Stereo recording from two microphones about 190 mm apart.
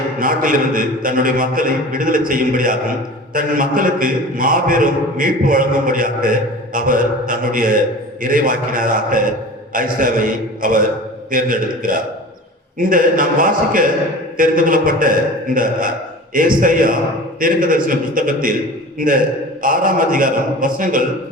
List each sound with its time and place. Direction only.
0.2 s a man's voice: 45° right (ahead or behind)